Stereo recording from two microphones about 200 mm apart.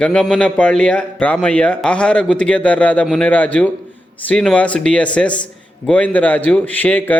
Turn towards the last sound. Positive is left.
turn(degrees=10)  # may be behind; listen again after turning